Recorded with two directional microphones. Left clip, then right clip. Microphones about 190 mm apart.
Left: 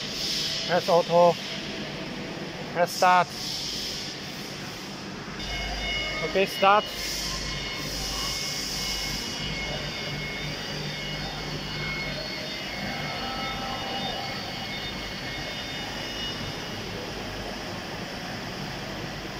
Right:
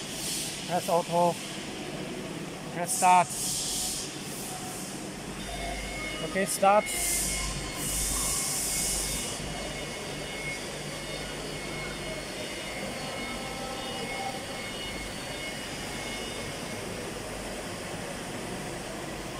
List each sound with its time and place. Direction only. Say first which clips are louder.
0.7 s speech: left 5 dB; 15° right (ahead or behind)
2.8 s speech: left 2 dB; 15° right (ahead or behind)
6.7 s speech: left 2 dB; 15° right (ahead or behind)